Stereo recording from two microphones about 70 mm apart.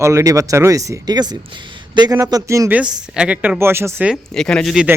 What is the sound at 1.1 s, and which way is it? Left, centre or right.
Speech, right.